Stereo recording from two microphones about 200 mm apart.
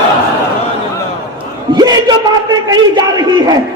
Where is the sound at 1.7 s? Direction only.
20° right (ahead or behind).